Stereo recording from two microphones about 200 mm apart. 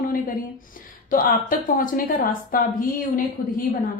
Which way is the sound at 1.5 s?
45° left (ahead or behind).